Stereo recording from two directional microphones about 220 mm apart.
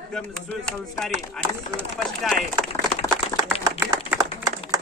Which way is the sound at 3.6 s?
10° right (ahead or behind).